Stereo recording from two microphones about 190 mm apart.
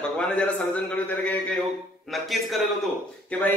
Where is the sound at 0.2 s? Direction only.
5° left (ahead or behind).